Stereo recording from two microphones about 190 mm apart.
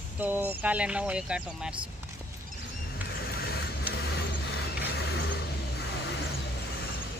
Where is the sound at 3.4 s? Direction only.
55° left (ahead or behind).